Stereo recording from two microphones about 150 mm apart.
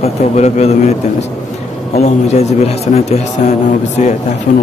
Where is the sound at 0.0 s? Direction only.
45° left (ahead or behind).